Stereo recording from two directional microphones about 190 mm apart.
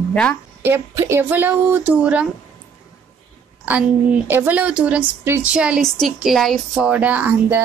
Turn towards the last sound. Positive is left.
turn(degrees=-10)  # may be behind; listen again after turning